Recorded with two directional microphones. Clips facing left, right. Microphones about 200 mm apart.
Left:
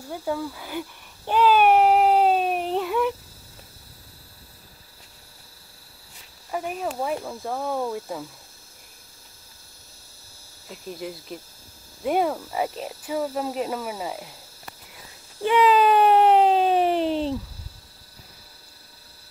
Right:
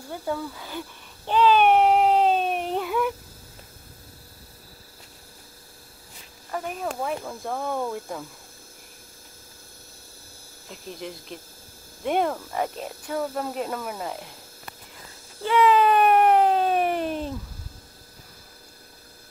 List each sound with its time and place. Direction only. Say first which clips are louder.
0.1 s babbling: left 2 dB; 10° left (ahead or behind)
6.5 s speech: left 2 dB; 5° left (ahead or behind)
10.7 s speech: left 2 dB; 5° left (ahead or behind)
15.4 s a sound: left 1 dB; 15° left (ahead or behind)